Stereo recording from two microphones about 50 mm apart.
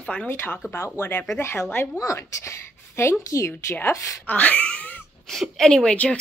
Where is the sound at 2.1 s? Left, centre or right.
Left.